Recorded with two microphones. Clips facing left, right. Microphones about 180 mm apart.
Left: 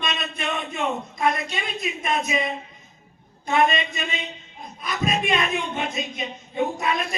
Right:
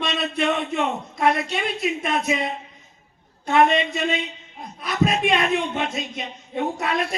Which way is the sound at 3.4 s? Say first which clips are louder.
Right 3 dB; 70° right (ahead or behind).